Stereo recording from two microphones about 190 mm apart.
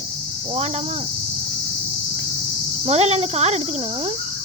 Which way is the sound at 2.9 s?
35° right (ahead or behind).